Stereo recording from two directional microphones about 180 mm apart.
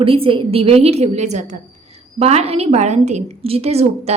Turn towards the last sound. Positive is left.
turn(degrees=-35)  # may be behind; listen again after turning